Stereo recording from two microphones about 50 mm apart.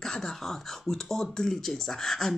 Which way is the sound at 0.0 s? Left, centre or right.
Centre.